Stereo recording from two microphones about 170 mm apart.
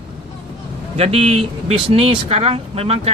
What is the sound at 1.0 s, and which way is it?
Speech, 35° right (ahead or behind).